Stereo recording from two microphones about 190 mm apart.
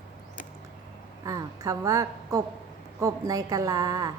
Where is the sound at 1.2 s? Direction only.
20° right (ahead or behind).